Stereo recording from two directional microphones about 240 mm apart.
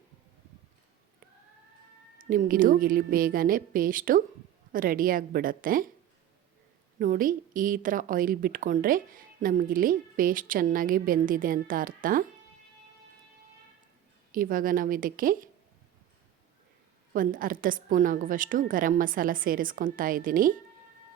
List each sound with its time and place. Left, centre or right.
2.1 s a woman's voice: right
7.0 s a woman's voice: right
14.3 s a woman's voice: right
17.2 s a woman's voice: right